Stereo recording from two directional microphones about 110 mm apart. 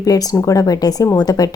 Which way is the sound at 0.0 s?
35° left (ahead or behind).